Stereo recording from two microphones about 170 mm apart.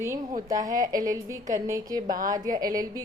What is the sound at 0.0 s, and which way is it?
A woman's voice, 15° right (ahead or behind).